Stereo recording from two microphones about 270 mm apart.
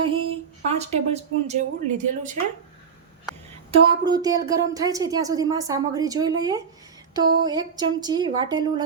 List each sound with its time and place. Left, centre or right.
0.0 s a sound: centre
0.8 s speech: right
3.7 s speech: centre